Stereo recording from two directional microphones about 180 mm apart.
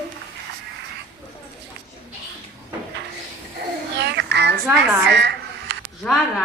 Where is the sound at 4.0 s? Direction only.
70° right (ahead or behind).